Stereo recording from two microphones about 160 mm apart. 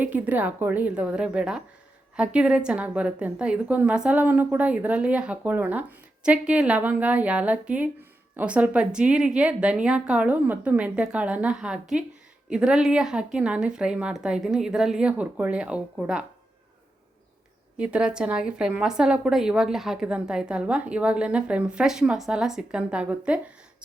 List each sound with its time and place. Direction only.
0.0 s a woman's voice: 10° right (ahead or behind)
17.7 s speech: 5° right (ahead or behind)